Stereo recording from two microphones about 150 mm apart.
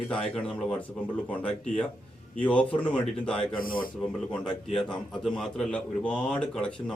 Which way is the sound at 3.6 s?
70° left (ahead or behind).